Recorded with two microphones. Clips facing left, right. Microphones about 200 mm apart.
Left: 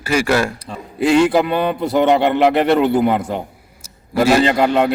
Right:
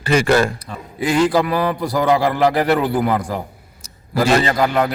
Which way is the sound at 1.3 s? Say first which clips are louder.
Left 1 dB; 25° left (ahead or behind).